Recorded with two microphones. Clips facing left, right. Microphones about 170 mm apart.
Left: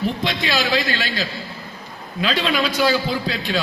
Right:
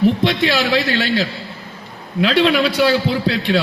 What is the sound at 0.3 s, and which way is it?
A man's voice, 65° right (ahead or behind).